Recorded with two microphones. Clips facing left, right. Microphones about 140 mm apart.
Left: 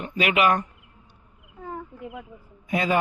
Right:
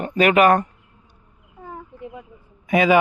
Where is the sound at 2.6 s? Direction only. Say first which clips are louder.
Right 7 dB; 85° right.